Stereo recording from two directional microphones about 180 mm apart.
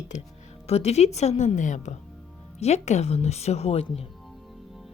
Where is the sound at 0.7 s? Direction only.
35° left (ahead or behind).